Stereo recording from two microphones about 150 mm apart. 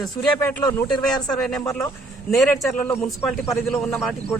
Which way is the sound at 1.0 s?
5° left (ahead or behind).